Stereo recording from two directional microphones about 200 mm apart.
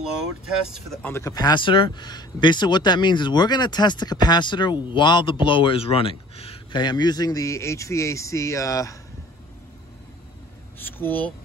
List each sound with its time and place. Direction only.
1.0 s speech: 15° left (ahead or behind)
10.8 s speech: 10° left (ahead or behind)